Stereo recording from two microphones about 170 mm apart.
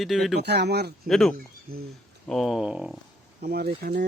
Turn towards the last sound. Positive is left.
turn(degrees=-65)  # may be behind; listen again after turning